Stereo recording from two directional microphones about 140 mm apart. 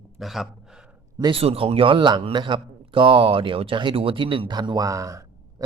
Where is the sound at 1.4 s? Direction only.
45° right (ahead or behind).